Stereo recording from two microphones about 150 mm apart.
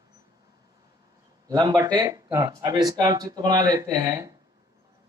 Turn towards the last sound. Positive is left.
turn(degrees=-25)  # may be behind; listen again after turning